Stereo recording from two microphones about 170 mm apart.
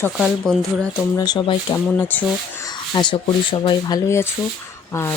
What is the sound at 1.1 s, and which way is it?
Speech, 25° left (ahead or behind).